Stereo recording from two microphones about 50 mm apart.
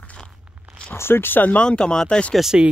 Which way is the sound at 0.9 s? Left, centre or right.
Left.